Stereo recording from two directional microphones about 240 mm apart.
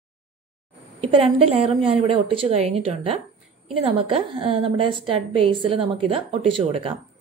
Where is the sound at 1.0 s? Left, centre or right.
Right.